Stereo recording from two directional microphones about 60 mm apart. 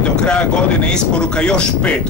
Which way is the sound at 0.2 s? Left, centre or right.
Centre.